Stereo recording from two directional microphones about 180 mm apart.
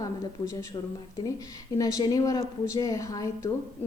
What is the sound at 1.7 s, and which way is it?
A woman's voice, 20° left (ahead or behind).